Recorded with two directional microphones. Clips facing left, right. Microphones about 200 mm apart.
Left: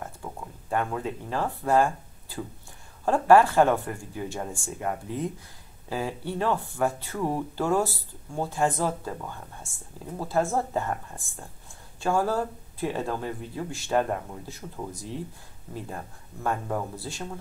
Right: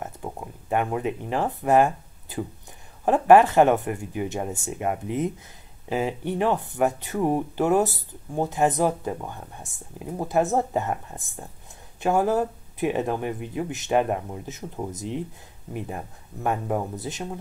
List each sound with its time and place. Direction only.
0.0 s a sound: 20° right (ahead or behind)
3.1 s speech: 20° right (ahead or behind)
16.4 s speech: 20° right (ahead or behind)